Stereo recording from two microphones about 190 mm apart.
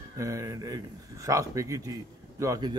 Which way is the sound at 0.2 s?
15° right (ahead or behind).